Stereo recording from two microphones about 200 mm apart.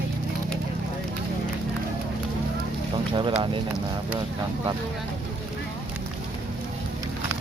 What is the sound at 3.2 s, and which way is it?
Speech, 25° right (ahead or behind).